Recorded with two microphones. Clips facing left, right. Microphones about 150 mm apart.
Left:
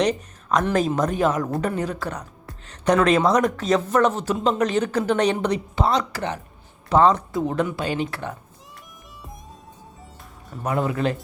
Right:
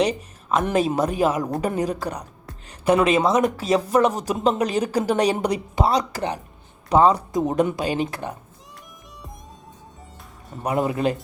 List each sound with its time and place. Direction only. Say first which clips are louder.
0.0 s speech: even; 5° right (ahead or behind)
10.6 s speech: right 1 dB; 25° right (ahead or behind)